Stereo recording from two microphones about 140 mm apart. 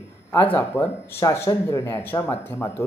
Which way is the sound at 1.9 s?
15° left (ahead or behind).